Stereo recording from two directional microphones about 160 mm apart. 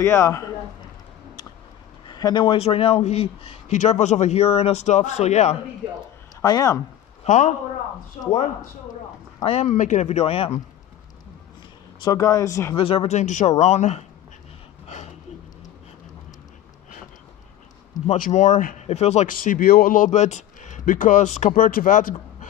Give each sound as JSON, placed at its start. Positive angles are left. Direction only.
{"t": 0.0, "sound": "speech", "side_deg": 15}
{"t": 2.0, "sound": "a man's voice", "side_deg": 25}
{"t": 6.4, "sound": "speech", "side_deg": 20}
{"t": 7.2, "sound": "speech", "side_deg": 50}
{"t": 9.4, "sound": "a man's voice", "side_deg": 40}
{"t": 12.0, "sound": "speech", "side_deg": 20}
{"t": 12.7, "sound": "speech", "side_deg": 35}
{"t": 18.1, "sound": "speech", "side_deg": 55}
{"t": 19.3, "sound": "speech", "side_deg": 60}